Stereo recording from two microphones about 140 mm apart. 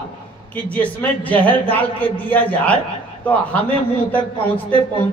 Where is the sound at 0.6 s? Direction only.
10° left (ahead or behind).